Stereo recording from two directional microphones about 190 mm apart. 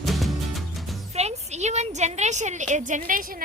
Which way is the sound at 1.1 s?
35° right (ahead or behind).